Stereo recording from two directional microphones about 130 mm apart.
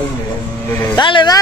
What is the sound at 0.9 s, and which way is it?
Vehicle, 35° left (ahead or behind).